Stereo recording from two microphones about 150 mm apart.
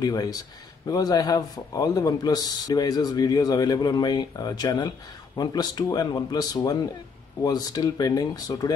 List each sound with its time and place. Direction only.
0.0 s speech: 25° left (ahead or behind)